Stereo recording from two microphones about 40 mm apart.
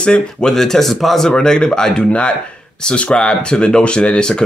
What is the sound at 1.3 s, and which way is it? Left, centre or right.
Speech, left.